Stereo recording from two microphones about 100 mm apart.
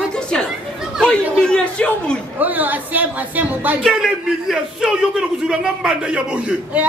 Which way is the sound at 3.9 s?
5° right (ahead or behind).